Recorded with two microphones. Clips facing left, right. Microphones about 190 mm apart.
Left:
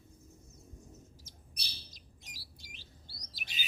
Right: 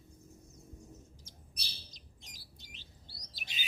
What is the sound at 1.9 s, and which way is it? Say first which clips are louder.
Bird: left 1 dB; 5° left (ahead or behind).